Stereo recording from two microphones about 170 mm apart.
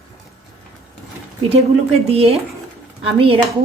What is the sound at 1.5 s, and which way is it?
Speech, 35° right (ahead or behind).